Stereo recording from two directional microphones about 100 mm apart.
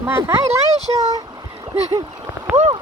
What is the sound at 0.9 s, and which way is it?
Speech, 55° right (ahead or behind).